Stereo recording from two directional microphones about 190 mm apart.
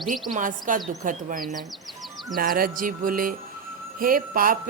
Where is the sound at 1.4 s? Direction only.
Centre (ahead or behind).